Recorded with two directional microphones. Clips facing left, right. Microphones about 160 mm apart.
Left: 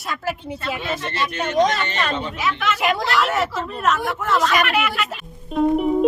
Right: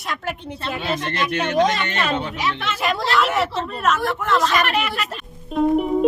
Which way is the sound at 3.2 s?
Centre (ahead or behind).